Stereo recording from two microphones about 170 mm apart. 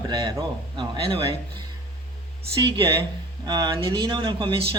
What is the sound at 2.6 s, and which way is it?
Speech, 30° right (ahead or behind).